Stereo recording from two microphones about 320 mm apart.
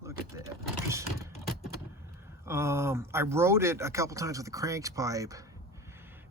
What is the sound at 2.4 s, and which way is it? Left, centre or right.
Speech, centre.